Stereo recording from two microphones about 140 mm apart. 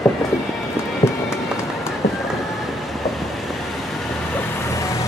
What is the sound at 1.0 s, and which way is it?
Run, 25° left (ahead or behind).